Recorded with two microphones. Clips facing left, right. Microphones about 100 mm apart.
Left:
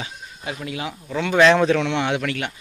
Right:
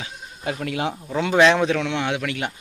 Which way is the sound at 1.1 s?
20° right (ahead or behind).